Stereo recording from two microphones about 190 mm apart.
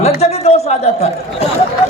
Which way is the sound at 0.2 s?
35° left (ahead or behind).